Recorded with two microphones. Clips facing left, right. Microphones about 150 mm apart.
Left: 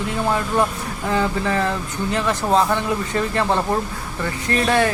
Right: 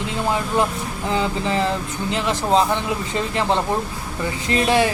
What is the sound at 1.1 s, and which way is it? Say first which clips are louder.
Speech: left 1 dB; 20° right (ahead or behind).